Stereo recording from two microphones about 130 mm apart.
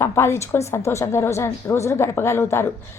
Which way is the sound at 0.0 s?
20° left (ahead or behind).